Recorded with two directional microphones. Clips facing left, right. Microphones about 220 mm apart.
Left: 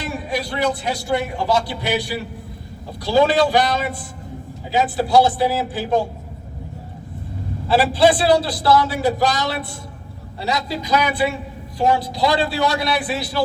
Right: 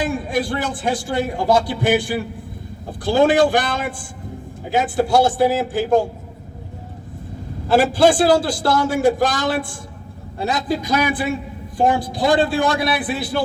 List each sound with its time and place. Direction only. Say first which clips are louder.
0.0 s a man's voice: right 4 dB; 50° right (ahead or behind)
7.7 s a man's voice: right 1 dB; 45° right (ahead or behind)